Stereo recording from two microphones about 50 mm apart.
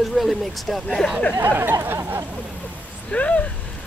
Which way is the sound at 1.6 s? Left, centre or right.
Right.